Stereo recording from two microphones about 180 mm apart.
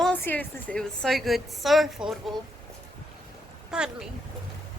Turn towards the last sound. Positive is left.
turn(degrees=-5)  # may be behind; listen again after turning